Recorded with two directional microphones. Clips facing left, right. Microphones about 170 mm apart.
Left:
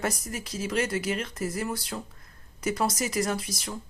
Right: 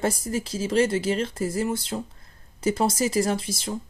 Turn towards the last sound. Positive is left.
turn(degrees=-25)  # may be behind; listen again after turning